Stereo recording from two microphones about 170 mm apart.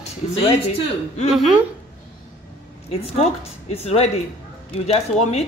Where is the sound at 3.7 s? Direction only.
40° left (ahead or behind).